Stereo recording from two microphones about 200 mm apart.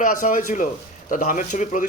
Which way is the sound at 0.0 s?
40° left (ahead or behind).